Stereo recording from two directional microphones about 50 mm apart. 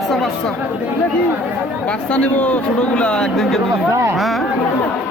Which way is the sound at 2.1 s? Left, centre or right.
Left.